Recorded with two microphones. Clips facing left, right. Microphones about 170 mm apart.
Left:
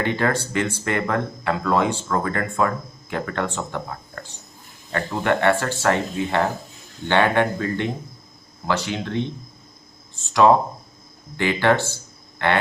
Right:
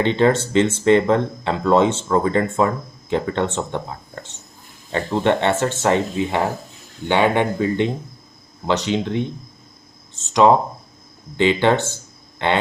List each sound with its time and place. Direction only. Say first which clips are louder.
0.0 s speech: right 6 dB; 25° right (ahead or behind)